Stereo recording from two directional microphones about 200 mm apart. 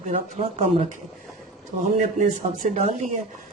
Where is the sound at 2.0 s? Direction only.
35° right (ahead or behind).